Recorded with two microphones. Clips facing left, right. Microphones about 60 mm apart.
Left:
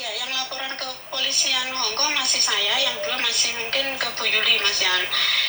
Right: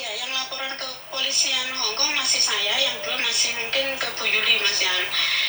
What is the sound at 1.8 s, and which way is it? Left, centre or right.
A woman's voice, left.